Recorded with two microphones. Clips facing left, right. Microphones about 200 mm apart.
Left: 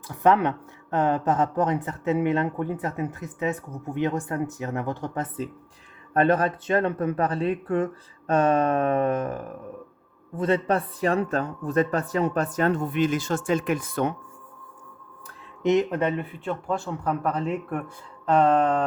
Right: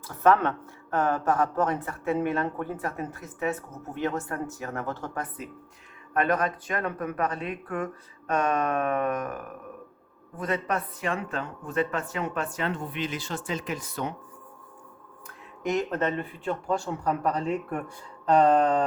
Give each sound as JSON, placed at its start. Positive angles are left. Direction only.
{"t": 0.1, "sound": "speech", "side_deg": 15}
{"t": 15.6, "sound": "speech", "side_deg": 20}